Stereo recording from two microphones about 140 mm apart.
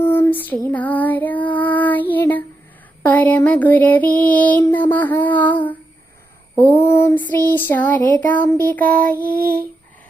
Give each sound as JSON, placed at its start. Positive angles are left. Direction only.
{"t": 0.0, "sound": "female singing", "side_deg": 15}
{"t": 3.0, "sound": "a sound", "side_deg": 10}
{"t": 9.3, "sound": "child singing", "side_deg": -90}